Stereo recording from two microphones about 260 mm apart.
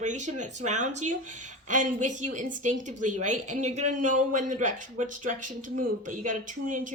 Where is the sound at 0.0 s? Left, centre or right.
Right.